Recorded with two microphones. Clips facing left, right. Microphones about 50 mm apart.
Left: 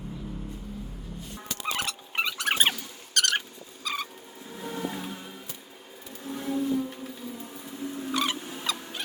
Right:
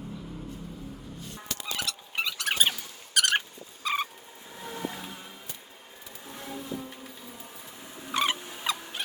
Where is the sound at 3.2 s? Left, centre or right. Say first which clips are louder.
Even; centre.